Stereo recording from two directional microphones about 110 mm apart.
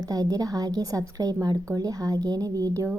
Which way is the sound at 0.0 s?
35° right (ahead or behind).